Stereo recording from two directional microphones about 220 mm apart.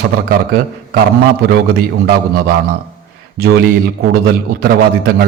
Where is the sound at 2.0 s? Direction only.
40° right (ahead or behind).